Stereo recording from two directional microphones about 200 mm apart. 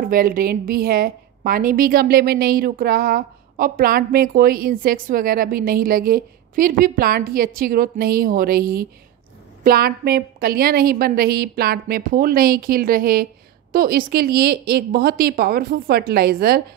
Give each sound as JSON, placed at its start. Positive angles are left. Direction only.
{"t": 0.0, "sound": "a woman's voice", "side_deg": -45}